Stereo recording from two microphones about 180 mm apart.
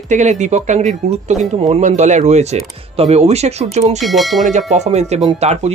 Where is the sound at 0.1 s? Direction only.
40° right (ahead or behind).